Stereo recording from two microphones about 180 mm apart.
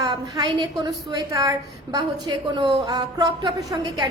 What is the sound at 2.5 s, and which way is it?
A woman's voice, 25° right (ahead or behind).